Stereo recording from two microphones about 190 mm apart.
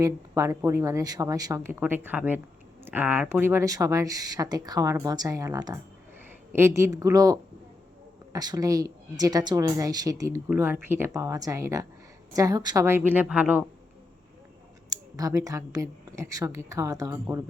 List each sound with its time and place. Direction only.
0.0 s speech: 15° right (ahead or behind)
14.8 s speech: 20° right (ahead or behind)